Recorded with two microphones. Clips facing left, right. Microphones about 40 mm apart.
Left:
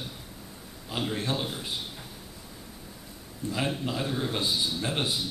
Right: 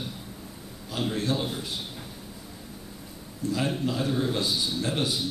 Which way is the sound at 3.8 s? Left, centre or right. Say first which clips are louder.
Right 3 dB; centre.